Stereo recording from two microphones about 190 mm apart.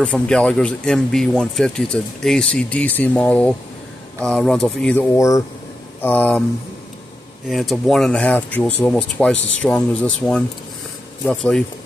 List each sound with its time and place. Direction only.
0.0 s speech: 5° left (ahead or behind)
5.1 s speech: 15° left (ahead or behind)
7.4 s speech: centre (ahead or behind)